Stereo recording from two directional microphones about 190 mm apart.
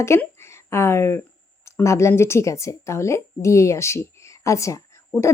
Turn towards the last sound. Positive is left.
turn(degrees=15)  # may be behind; listen again after turning